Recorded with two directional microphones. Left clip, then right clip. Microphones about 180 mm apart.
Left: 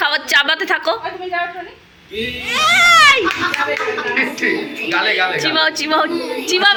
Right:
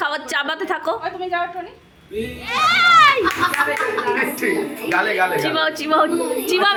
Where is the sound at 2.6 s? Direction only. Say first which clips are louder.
Left 2 dB; centre (ahead or behind).